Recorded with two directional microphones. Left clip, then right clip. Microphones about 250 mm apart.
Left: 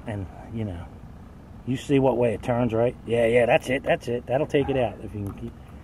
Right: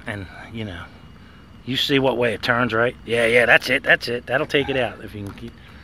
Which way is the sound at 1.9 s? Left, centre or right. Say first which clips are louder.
Right 1 dB; right.